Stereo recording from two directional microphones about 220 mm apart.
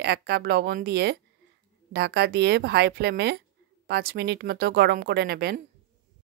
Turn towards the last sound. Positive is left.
turn(degrees=-45)  # may be behind; listen again after turning